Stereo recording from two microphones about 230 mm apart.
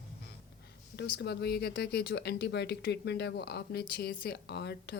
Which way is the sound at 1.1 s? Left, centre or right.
Left.